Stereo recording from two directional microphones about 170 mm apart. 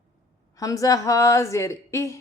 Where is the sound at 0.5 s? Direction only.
20° left (ahead or behind).